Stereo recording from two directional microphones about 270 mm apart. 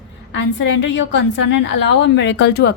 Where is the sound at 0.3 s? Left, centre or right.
Left.